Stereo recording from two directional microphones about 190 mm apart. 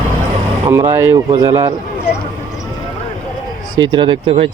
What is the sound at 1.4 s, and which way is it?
Speech, 30° right (ahead or behind).